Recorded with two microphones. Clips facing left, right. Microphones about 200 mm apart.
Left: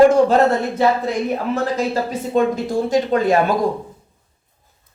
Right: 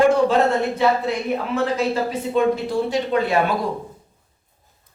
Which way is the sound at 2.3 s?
45° left (ahead or behind).